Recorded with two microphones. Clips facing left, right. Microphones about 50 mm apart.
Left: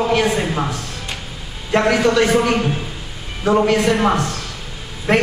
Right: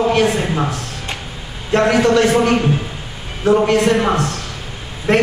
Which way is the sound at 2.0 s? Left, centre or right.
Centre.